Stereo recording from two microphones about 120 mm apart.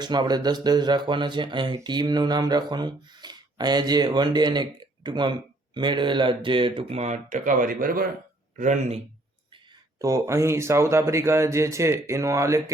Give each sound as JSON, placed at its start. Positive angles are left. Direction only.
{"t": 0.0, "sound": "speech", "side_deg": -35}
{"t": 7.0, "sound": "speech", "side_deg": -80}
{"t": 10.0, "sound": "speech", "side_deg": -25}